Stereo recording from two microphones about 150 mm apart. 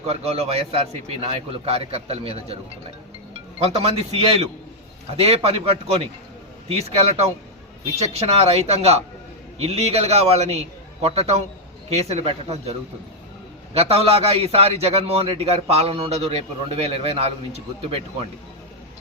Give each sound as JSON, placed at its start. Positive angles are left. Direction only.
{"t": 0.0, "sound": "a man's voice", "side_deg": -45}
{"t": 3.6, "sound": "a man's voice", "side_deg": -40}
{"t": 13.7, "sound": "a man's voice", "side_deg": -40}